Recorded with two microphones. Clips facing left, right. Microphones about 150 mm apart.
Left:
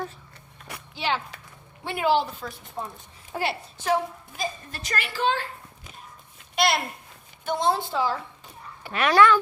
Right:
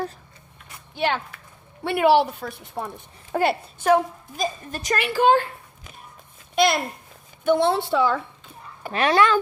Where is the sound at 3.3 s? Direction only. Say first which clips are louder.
Right 7 dB; 50° right (ahead or behind).